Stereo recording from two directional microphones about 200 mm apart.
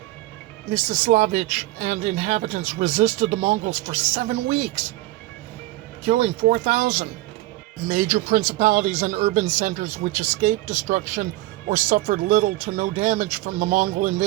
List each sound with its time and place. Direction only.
0.7 s speech: 40° right (ahead or behind)
6.1 s speech: 35° right (ahead or behind)